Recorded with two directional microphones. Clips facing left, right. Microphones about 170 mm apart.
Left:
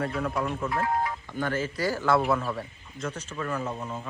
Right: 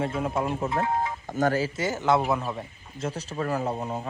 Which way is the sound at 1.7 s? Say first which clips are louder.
Right 1 dB; 20° right (ahead or behind).